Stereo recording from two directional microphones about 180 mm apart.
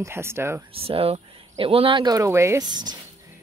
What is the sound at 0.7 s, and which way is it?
Speech, 30° right (ahead or behind).